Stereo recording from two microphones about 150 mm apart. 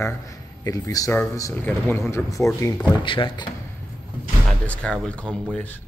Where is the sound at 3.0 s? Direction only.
35° left (ahead or behind).